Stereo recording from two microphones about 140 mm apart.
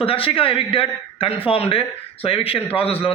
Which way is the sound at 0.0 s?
40° left (ahead or behind).